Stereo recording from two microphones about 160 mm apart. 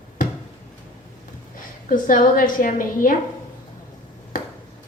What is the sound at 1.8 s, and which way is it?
A woman's voice, 55° left (ahead or behind).